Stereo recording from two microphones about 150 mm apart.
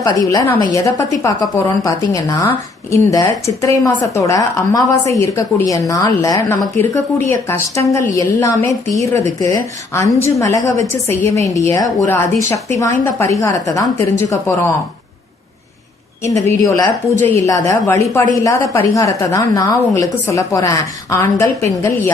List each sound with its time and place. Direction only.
0.0 s a woman's voice: 25° left (ahead or behind)
16.3 s a woman's voice: 20° left (ahead or behind)